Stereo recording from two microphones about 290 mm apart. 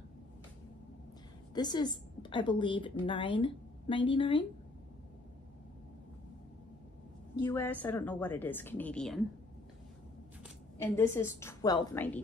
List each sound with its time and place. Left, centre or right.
1.5 s a woman's voice: centre
7.4 s speech: centre
10.8 s a woman's voice: centre